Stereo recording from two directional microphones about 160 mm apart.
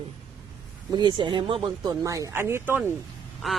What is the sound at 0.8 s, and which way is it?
Speech, 25° right (ahead or behind).